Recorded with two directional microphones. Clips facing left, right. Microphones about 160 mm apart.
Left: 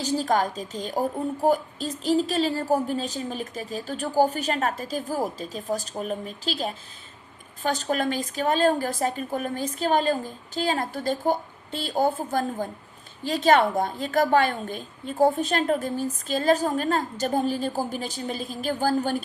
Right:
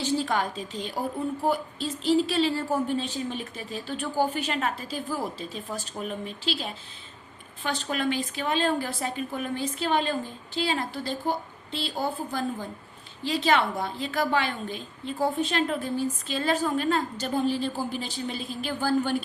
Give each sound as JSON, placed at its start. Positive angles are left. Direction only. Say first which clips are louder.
{"t": 0.0, "sound": "a woman's voice", "louder": "left 3 dB", "side_deg": 40}